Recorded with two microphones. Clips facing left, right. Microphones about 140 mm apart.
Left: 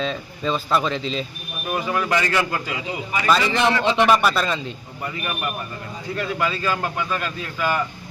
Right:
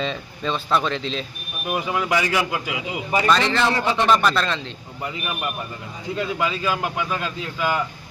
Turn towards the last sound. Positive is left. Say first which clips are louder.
# even
turn(degrees=-15)  # may be behind; listen again after turning